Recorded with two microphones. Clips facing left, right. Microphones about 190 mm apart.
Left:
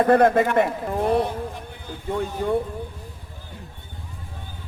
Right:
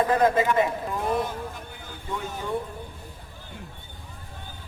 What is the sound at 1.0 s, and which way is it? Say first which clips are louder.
Speech: left 6 dB; 35° left (ahead or behind).